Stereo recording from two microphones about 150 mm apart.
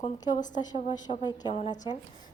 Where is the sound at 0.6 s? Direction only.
45° left (ahead or behind).